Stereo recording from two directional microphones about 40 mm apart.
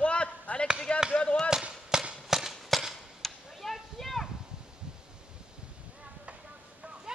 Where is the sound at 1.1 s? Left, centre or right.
Left.